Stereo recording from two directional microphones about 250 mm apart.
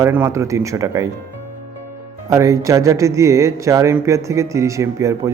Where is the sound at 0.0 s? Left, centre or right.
Centre.